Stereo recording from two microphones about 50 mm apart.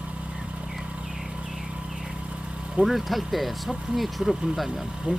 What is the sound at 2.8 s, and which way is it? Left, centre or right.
Speech, centre.